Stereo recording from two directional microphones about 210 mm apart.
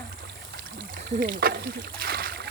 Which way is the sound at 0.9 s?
40° right (ahead or behind).